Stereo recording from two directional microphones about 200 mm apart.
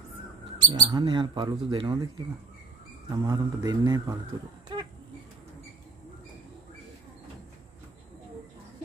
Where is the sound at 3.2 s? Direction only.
20° right (ahead or behind).